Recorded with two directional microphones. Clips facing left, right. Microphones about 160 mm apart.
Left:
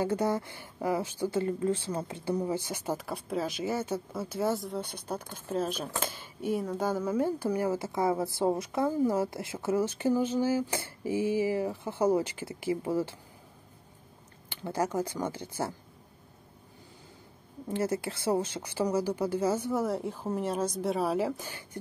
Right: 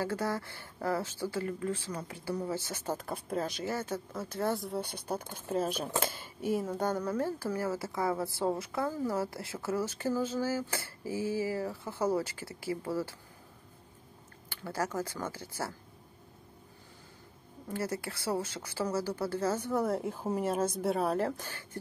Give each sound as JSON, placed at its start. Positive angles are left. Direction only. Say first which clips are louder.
{"t": 0.0, "sound": "speech", "louder": "left 5 dB", "side_deg": 20}
{"t": 6.0, "sound": "a sound", "louder": "right 1 dB", "side_deg": -55}
{"t": 6.4, "sound": "speech", "louder": "left 1 dB", "side_deg": 0}
{"t": 14.5, "sound": "speech", "louder": "left 4 dB", "side_deg": 20}
{"t": 17.6, "sound": "speech", "louder": "left 5 dB", "side_deg": 20}